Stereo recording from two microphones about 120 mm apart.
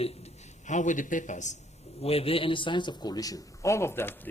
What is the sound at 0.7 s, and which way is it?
Speech, 90° left.